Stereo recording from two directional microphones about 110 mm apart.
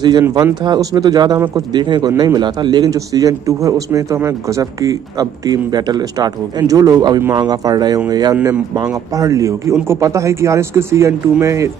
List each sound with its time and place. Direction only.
0.7 s a man's voice: 35° right (ahead or behind)